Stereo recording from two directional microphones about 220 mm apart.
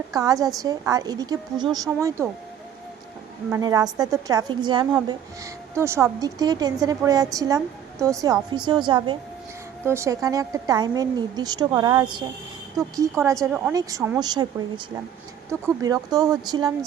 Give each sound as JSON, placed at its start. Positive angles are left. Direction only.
{"t": 0.1, "sound": "a woman's voice", "side_deg": -15}
{"t": 3.5, "sound": "a woman's voice", "side_deg": -15}
{"t": 15.4, "sound": "a woman's voice", "side_deg": -15}